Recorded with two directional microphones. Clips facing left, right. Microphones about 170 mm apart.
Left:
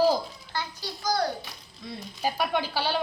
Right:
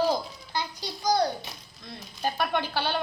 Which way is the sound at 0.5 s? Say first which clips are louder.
Right 2 dB; 15° right (ahead or behind).